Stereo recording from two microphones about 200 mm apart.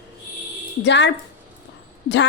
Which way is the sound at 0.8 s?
60° left (ahead or behind).